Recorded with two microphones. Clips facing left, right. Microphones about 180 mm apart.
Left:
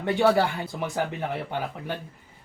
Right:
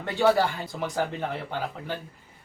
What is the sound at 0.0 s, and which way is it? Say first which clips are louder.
Speech: left 1 dB; 20° left (ahead or behind).